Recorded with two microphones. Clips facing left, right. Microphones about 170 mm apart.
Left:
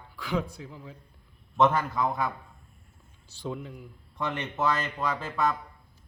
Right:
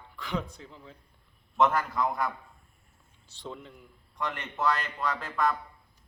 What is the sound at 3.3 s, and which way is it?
Speech, 10° left (ahead or behind).